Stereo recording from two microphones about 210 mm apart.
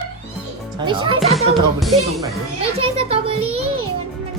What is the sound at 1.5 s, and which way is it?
Music, centre (ahead or behind).